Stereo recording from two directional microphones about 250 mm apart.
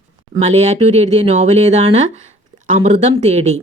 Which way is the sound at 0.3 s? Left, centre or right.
Right.